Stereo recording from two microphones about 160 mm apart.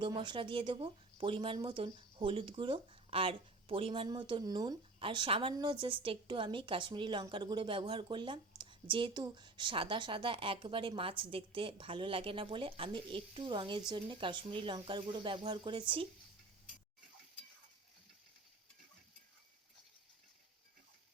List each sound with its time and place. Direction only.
0.0 s speech: 30° right (ahead or behind)